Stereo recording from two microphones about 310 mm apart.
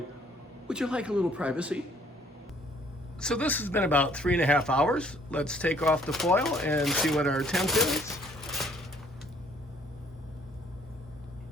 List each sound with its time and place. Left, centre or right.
0.7 s speech: centre
3.2 s speech: centre